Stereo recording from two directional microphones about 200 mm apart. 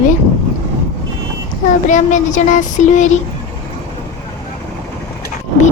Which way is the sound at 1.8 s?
40° left (ahead or behind).